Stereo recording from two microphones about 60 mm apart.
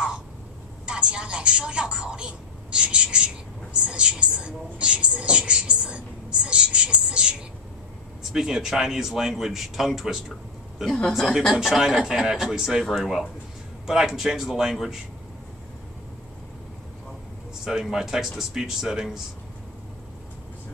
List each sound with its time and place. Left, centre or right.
0.8 s a woman's voice: centre
8.2 s speech: centre
10.9 s a woman's voice: centre
11.6 s a woman's voice: centre
17.6 s a woman's voice: centre